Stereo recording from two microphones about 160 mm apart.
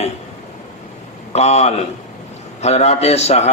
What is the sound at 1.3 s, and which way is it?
A man's voice, 45° left (ahead or behind).